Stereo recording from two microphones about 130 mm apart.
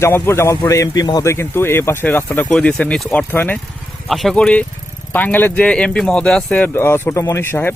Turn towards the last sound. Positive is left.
turn(degrees=15)  # may be behind; listen again after turning